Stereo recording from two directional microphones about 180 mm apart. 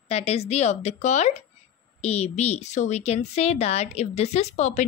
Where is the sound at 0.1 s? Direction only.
35° left (ahead or behind).